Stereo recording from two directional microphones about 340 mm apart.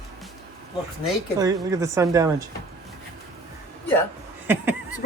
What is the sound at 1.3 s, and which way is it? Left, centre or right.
A woman's voice, centre.